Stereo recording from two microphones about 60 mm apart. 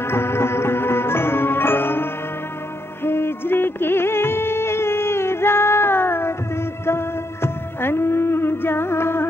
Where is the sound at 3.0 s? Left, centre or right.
Left.